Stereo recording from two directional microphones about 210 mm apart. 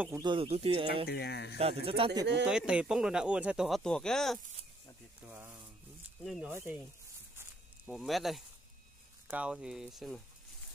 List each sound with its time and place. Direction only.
0.0 s speech: 15° right (ahead or behind)
1.0 s speech: 50° left (ahead or behind)
1.6 s speech: 25° right (ahead or behind)
2.4 s speech: 5° right (ahead or behind)
5.2 s speech: 10° right (ahead or behind)
7.3 s walk: 5° right (ahead or behind)
9.3 s speech: 5° right (ahead or behind)